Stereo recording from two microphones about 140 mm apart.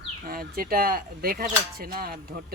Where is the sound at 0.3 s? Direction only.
90° right.